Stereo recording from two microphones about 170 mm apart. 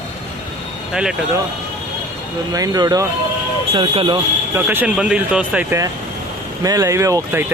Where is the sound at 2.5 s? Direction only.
20° right (ahead or behind).